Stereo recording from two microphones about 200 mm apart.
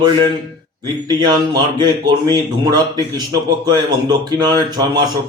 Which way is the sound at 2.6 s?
20° right (ahead or behind).